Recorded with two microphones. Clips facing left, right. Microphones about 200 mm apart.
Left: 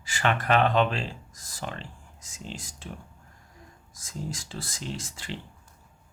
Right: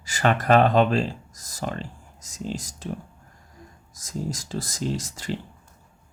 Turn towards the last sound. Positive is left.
turn(degrees=-40)  # may be behind; listen again after turning